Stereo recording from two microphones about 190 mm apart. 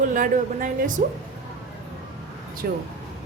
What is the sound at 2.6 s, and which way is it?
Speech, 55° right (ahead or behind).